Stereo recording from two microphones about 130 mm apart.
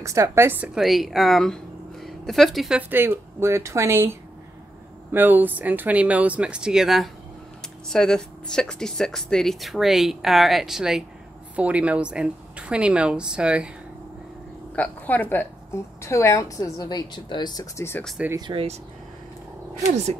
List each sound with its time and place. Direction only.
0.0 s speech: 25° right (ahead or behind)
0.7 s speech: centre (ahead or behind)
2.9 s speech: 15° right (ahead or behind)
14.8 s a woman's voice: 10° left (ahead or behind)
18.3 s speech: 40° right (ahead or behind)